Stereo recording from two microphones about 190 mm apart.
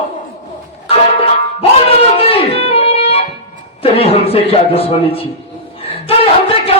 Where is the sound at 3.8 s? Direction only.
30° left (ahead or behind).